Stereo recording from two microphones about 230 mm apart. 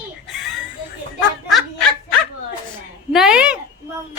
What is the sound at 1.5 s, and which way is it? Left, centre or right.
Snicker, centre.